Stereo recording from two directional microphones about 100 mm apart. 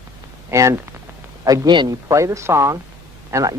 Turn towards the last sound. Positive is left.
turn(degrees=-35)  # may be behind; listen again after turning